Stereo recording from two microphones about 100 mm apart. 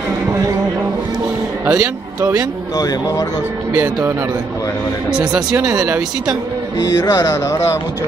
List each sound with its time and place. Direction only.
1.7 s speech: 10° right (ahead or behind)
2.8 s speech: 40° left (ahead or behind)
5.1 s speech: 5° right (ahead or behind)
6.8 s speech: 35° left (ahead or behind)